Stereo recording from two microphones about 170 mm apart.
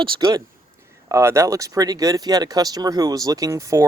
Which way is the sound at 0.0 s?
25° right (ahead or behind).